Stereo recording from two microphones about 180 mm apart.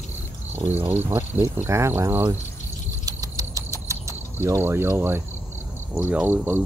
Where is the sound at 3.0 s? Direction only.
20° right (ahead or behind).